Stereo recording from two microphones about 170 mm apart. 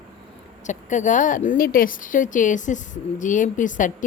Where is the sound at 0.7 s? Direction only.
45° left (ahead or behind).